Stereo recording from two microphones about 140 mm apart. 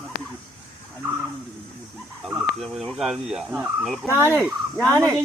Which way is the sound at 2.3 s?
Centre (ahead or behind).